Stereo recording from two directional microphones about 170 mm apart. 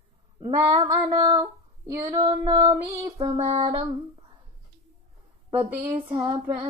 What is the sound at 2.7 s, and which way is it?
Child singing, 20° right (ahead or behind).